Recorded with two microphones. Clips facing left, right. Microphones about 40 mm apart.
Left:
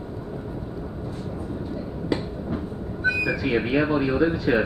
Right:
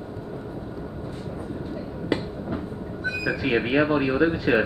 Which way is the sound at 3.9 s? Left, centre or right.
Centre.